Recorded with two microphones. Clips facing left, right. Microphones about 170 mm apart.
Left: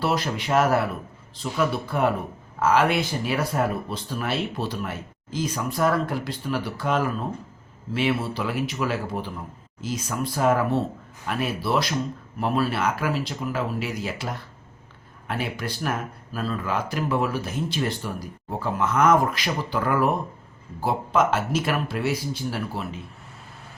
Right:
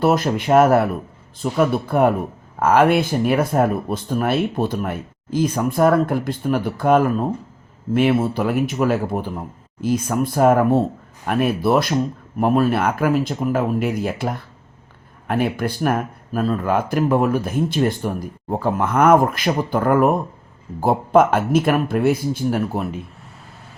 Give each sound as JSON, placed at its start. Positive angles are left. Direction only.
{"t": 0.0, "sound": "speech", "side_deg": -50}